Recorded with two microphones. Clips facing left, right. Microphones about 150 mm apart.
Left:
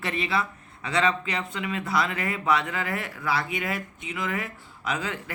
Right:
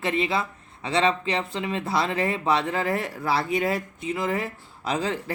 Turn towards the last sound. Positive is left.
turn(degrees=-35)  # may be behind; listen again after turning